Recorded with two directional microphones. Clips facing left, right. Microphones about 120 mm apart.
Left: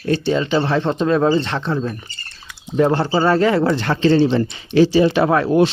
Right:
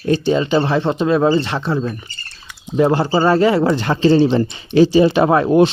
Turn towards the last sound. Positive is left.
turn(degrees=-20)  # may be behind; listen again after turning